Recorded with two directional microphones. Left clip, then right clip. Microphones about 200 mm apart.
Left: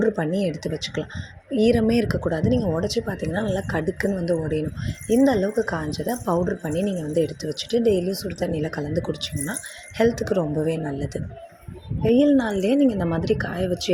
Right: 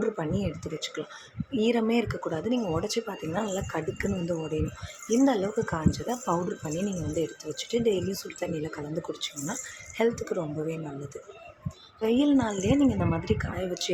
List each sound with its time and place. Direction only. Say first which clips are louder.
0.0 s speech: left 7 dB; 25° left (ahead or behind)